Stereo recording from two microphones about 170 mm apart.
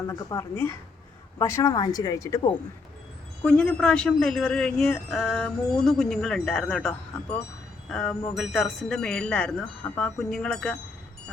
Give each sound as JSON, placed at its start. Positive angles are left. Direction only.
{"t": 0.1, "sound": "a woman's voice", "side_deg": 15}
{"t": 3.4, "sound": "a woman's voice", "side_deg": 5}
{"t": 7.9, "sound": "music", "side_deg": 0}
{"t": 8.4, "sound": "a woman's voice", "side_deg": 0}